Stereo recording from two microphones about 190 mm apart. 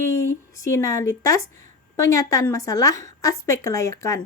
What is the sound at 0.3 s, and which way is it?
A woman's voice, 15° left (ahead or behind).